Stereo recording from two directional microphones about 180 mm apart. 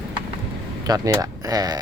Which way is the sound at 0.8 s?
20° right (ahead or behind).